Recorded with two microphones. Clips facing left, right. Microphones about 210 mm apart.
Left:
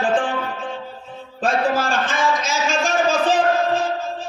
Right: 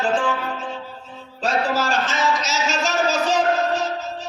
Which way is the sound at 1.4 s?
55° left (ahead or behind).